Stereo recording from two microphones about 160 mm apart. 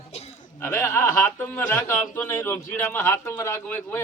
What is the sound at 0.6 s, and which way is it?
A man's voice, 15° left (ahead or behind).